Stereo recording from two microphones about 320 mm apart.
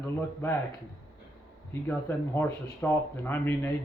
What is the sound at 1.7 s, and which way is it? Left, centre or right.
Speech, centre.